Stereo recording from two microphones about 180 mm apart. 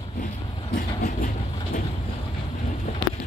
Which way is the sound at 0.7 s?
50° left (ahead or behind).